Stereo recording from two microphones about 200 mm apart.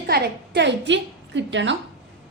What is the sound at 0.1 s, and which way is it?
A woman's voice, 60° right (ahead or behind).